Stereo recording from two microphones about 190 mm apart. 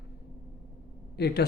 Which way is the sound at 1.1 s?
60° left (ahead or behind).